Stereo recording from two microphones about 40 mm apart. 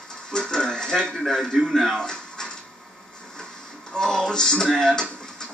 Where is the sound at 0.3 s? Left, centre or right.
Centre.